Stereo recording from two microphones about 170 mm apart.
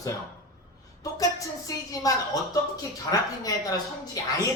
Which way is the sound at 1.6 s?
20° left (ahead or behind).